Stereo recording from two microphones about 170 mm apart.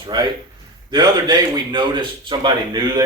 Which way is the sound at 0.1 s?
25° right (ahead or behind).